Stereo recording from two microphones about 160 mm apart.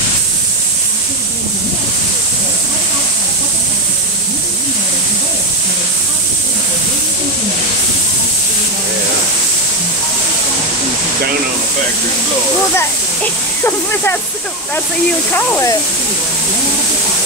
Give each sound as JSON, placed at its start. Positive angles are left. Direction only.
{"t": 12.7, "sound": "speech", "side_deg": 15}
{"t": 15.3, "sound": "speech", "side_deg": 15}